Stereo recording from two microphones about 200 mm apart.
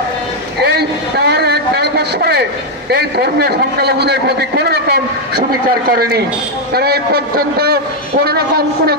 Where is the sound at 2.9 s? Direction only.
55° right (ahead or behind).